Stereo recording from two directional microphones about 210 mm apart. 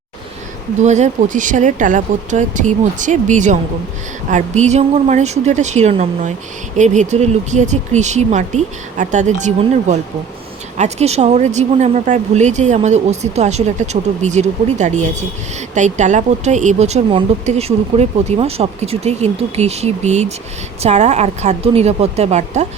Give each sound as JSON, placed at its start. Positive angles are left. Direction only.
{"t": 0.8, "sound": "a woman's voice", "side_deg": -35}